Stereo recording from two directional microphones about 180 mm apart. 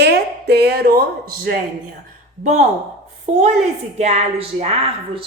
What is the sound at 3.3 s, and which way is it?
A woman's voice, 40° right (ahead or behind).